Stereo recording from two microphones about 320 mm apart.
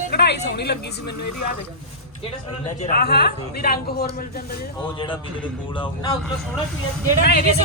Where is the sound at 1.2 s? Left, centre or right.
Left.